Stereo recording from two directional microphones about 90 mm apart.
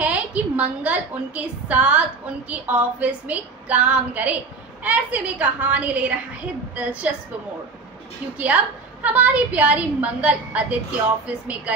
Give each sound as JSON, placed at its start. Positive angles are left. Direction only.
{"t": 0.0, "sound": "a woman's voice", "side_deg": -15}
{"t": 8.4, "sound": "a woman's voice", "side_deg": -15}